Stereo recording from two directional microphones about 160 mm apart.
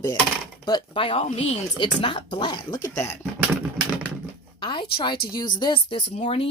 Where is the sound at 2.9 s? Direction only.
15° left (ahead or behind).